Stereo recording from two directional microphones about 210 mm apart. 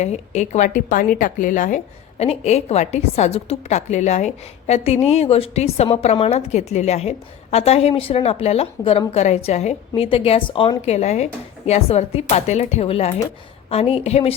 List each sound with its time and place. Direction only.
0.0 s a woman's voice: 30° left (ahead or behind)